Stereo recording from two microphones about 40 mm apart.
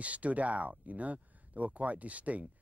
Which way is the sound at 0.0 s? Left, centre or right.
Right.